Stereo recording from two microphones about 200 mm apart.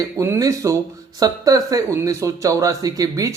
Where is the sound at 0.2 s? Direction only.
15° right (ahead or behind).